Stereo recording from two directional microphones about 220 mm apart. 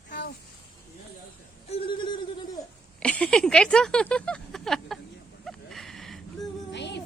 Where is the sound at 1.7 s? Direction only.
25° left (ahead or behind).